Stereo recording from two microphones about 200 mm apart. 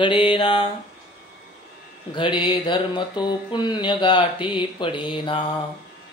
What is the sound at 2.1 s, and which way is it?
Mantra, 25° left (ahead or behind).